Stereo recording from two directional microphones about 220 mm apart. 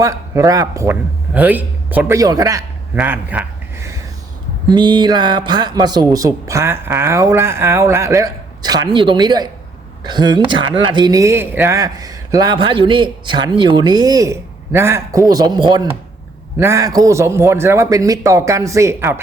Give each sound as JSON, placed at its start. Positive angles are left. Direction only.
{"t": 0.0, "sound": "speech", "side_deg": -15}
{"t": 4.7, "sound": "speech", "side_deg": -20}